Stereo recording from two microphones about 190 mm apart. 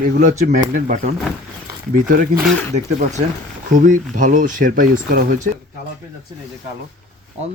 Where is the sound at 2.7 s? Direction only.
40° right (ahead or behind).